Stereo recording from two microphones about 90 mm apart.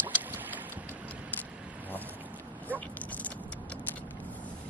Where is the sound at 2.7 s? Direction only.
15° left (ahead or behind).